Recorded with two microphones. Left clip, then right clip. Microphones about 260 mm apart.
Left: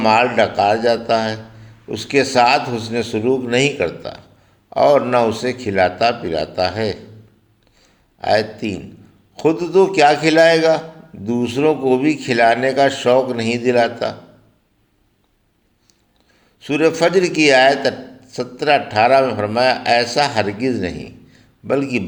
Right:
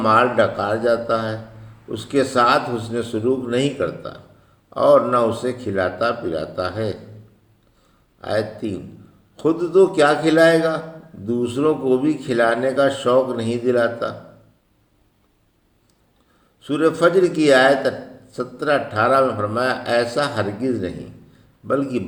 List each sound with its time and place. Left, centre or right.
0.0 s speech: left
8.2 s speech: left
16.6 s speech: left